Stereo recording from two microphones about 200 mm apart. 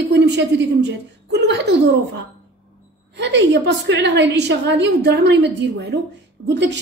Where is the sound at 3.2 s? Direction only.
60° right (ahead or behind).